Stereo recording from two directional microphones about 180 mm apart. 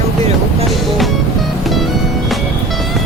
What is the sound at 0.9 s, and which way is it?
Music, centre (ahead or behind).